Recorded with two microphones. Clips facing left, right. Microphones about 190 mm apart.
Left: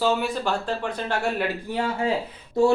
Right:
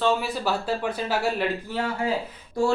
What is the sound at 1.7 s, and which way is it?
Speech, 25° left (ahead or behind).